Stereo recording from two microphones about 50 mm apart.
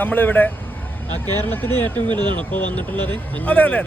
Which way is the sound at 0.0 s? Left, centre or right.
Left.